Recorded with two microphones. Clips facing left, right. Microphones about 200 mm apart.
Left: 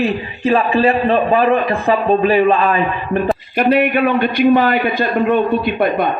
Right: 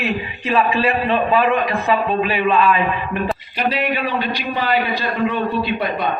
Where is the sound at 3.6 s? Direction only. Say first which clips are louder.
Left 8 dB; 55° left (ahead or behind).